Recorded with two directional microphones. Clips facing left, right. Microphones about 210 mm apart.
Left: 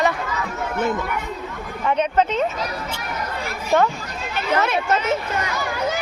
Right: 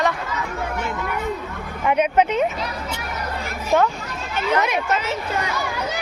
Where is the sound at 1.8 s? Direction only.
10° right (ahead or behind).